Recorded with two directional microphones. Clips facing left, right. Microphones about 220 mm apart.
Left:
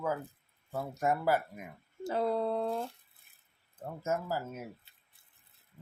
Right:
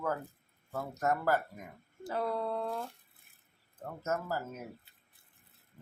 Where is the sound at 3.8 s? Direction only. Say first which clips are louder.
Left 1 dB; 10° left (ahead or behind).